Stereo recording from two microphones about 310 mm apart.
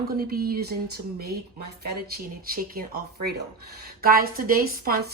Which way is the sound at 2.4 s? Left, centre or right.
Right.